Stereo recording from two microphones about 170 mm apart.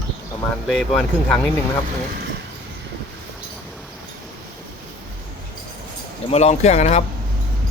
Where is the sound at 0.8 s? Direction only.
Centre (ahead or behind).